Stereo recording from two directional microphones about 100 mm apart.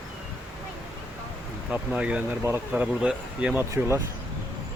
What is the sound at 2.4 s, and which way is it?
Speech, 25° right (ahead or behind).